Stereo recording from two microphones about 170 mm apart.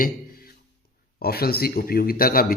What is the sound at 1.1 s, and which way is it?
Speech, 65° left (ahead or behind).